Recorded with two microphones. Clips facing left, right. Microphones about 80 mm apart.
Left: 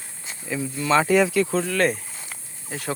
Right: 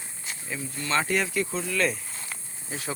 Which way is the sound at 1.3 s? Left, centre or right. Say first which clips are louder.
Left 6 dB; left.